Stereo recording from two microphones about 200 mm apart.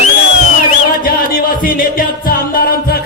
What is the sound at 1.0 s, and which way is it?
Music, 45° left (ahead or behind).